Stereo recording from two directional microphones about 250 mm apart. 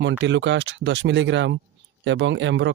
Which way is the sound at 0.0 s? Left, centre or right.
Right.